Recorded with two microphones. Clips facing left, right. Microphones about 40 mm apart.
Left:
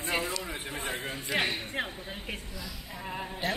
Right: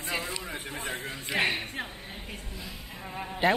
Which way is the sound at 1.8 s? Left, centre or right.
Centre.